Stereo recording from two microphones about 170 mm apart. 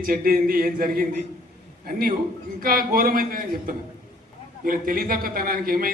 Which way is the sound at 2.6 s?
60° right (ahead or behind).